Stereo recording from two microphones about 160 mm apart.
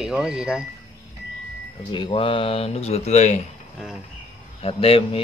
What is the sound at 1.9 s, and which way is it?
Speech, 30° left (ahead or behind).